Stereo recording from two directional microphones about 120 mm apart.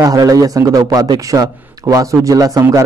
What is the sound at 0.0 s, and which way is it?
A man's voice, 30° right (ahead or behind).